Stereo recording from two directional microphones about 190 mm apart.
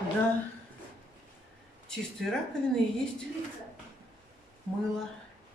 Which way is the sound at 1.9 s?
5° left (ahead or behind).